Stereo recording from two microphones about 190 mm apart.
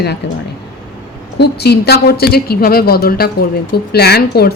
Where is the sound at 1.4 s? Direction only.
60° left (ahead or behind).